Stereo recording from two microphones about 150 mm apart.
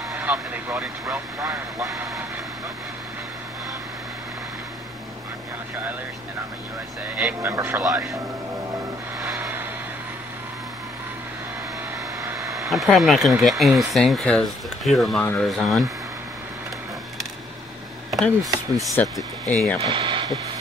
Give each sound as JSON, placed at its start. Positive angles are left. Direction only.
{"t": 0.1, "sound": "vehicle", "side_deg": -10}
{"t": 1.4, "sound": "speech", "side_deg": -20}
{"t": 7.2, "sound": "speech", "side_deg": -5}
{"t": 7.5, "sound": "speech", "side_deg": -20}
{"t": 9.3, "sound": "vehicle", "side_deg": -15}
{"t": 12.6, "sound": "speech", "side_deg": 0}
{"t": 18.1, "sound": "speech", "side_deg": 0}
{"t": 19.8, "sound": "speech", "side_deg": -35}